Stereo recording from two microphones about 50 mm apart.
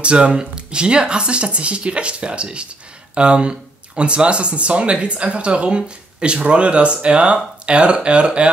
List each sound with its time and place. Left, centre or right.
0.0 s speech: right